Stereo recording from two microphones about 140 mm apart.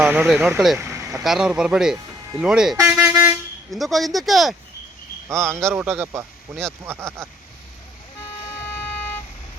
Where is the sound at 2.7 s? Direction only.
15° right (ahead or behind).